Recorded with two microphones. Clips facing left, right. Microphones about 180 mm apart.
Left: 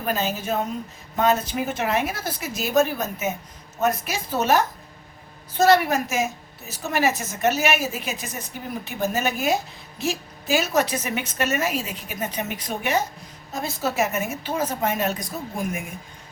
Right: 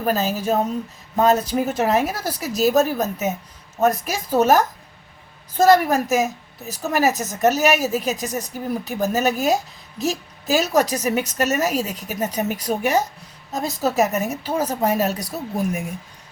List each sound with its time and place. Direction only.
0.0 s a woman's voice: 40° right (ahead or behind)
5.6 s a woman's voice: 40° right (ahead or behind)